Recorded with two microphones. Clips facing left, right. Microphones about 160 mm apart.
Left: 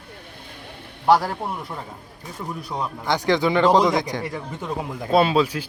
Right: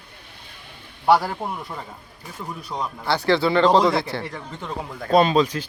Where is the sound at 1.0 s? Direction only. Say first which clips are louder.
Even; centre (ahead or behind).